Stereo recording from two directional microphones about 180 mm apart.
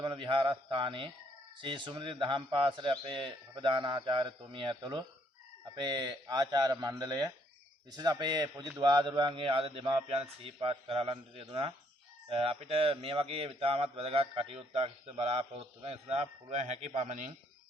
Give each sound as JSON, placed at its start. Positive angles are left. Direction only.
{"t": 0.0, "sound": "a man's voice", "side_deg": -25}